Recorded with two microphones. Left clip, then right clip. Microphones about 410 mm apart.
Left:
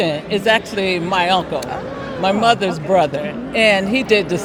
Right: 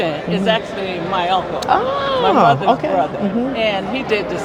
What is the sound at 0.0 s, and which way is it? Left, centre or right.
Speech, left.